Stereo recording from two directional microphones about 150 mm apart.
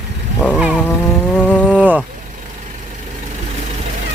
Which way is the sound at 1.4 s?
10° left (ahead or behind).